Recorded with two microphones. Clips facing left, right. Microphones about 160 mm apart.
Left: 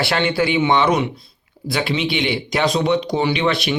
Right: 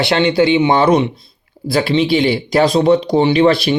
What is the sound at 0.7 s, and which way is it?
Speech, 40° right (ahead or behind).